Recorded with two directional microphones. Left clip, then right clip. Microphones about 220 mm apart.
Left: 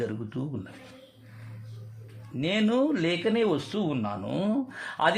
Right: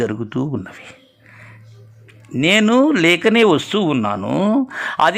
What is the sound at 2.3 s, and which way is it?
Speech, 30° right (ahead or behind).